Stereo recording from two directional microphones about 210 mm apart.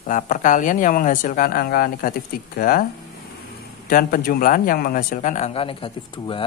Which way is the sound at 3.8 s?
45° left (ahead or behind).